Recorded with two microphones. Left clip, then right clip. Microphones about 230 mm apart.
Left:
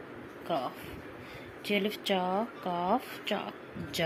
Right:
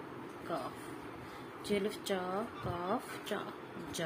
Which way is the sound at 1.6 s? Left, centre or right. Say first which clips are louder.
Left 5 dB; left.